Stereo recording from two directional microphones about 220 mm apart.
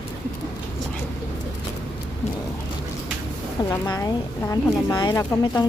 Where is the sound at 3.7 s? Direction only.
15° left (ahead or behind).